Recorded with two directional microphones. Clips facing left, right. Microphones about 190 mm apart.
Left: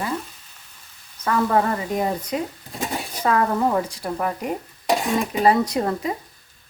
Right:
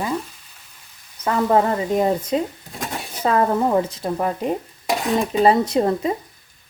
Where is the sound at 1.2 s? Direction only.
20° right (ahead or behind).